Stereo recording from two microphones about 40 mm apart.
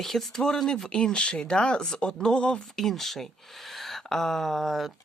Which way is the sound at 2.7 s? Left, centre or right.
Centre.